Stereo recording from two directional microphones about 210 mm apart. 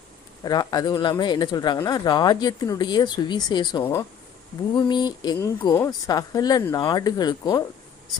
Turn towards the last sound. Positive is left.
turn(degrees=20)  # may be behind; listen again after turning